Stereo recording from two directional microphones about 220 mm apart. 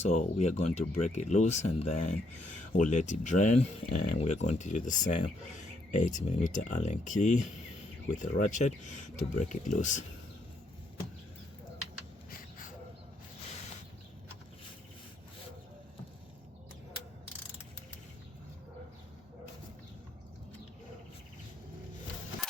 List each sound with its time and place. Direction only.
0.0 s speech: 30° left (ahead or behind)
12.3 s wheeze: 40° left (ahead or behind)